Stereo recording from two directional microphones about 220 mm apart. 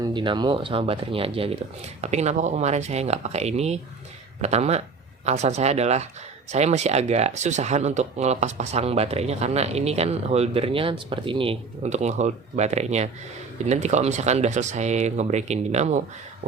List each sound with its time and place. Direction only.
0.0 s speech: 20° right (ahead or behind)